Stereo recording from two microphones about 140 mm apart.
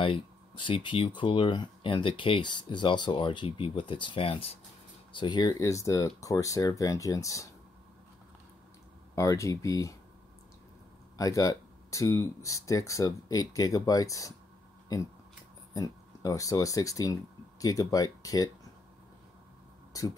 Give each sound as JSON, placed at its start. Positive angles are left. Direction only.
{"t": 0.0, "sound": "speech", "side_deg": 35}
{"t": 9.1, "sound": "speech", "side_deg": 20}
{"t": 11.1, "sound": "speech", "side_deg": 25}
{"t": 15.7, "sound": "speech", "side_deg": 25}